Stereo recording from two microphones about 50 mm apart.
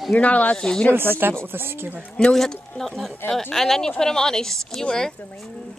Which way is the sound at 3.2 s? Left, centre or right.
Left.